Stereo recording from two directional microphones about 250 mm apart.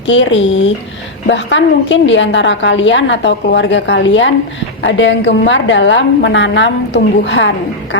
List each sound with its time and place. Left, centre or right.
0.1 s a woman's voice: left